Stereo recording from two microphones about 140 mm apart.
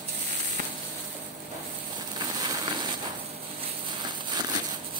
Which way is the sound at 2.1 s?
30° right (ahead or behind).